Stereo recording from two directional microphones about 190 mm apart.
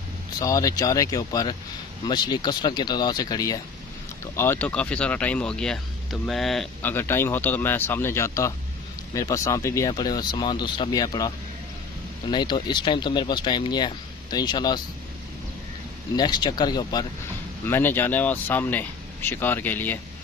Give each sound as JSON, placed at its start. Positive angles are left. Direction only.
{"t": 0.4, "sound": "speech", "side_deg": 20}
{"t": 16.2, "sound": "speech", "side_deg": 20}